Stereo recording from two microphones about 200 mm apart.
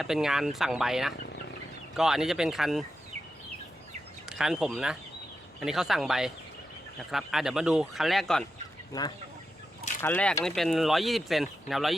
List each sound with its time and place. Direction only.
0.0 s speech: centre (ahead or behind)
4.3 s speech: 5° right (ahead or behind)
8.9 s chicken: 20° left (ahead or behind)
10.0 s speech: 10° left (ahead or behind)